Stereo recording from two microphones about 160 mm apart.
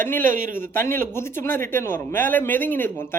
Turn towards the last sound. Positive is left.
turn(degrees=15)  # may be behind; listen again after turning